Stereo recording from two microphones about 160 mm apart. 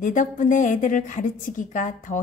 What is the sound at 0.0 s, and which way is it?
A woman's voice, 50° left (ahead or behind).